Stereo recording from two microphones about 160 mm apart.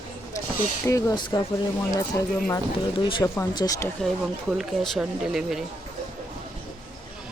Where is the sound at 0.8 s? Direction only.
20° left (ahead or behind).